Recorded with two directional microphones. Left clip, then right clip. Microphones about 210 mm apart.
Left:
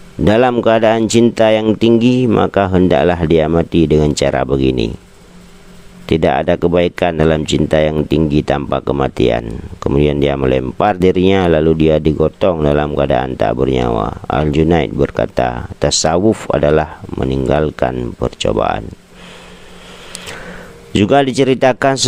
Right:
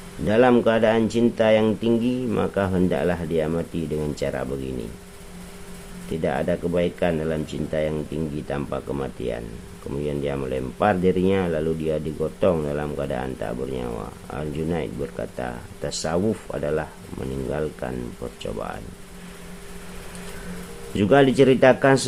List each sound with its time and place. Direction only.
0.3 s speech: 50° left (ahead or behind)
6.1 s speech: 50° left (ahead or behind)
20.9 s speech: 45° left (ahead or behind)